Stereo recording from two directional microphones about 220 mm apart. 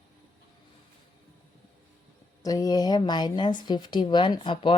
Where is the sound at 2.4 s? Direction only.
15° left (ahead or behind).